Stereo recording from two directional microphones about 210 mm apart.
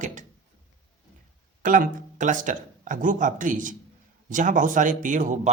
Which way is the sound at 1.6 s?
40° right (ahead or behind).